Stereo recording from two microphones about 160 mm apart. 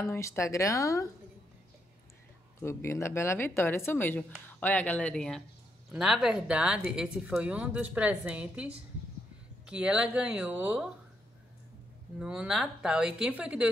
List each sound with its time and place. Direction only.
0.0 s speech: 20° left (ahead or behind)
2.6 s a woman's voice: 15° left (ahead or behind); by 10.9 s 10° right (ahead or behind)
12.2 s speech: 5° right (ahead or behind)